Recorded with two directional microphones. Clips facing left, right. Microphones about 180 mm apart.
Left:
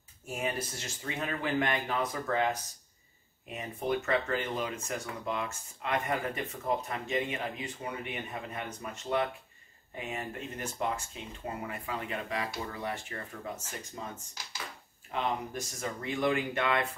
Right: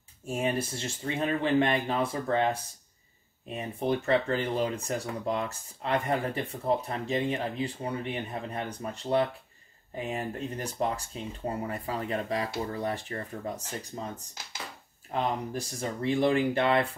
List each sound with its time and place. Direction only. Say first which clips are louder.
0.3 s speech: right 5 dB; 30° right (ahead or behind)